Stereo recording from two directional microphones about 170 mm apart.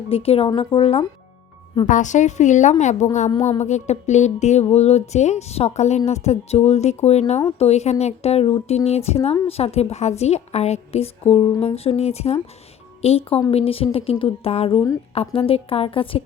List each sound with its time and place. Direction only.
0.1 s speech: 35° left (ahead or behind)
1.9 s a woman's voice: 45° left (ahead or behind)